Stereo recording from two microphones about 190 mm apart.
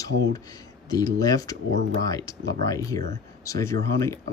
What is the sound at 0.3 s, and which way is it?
Speech, 20° left (ahead or behind).